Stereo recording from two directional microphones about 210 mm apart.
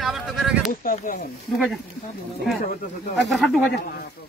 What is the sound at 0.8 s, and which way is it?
Speech, 40° left (ahead or behind).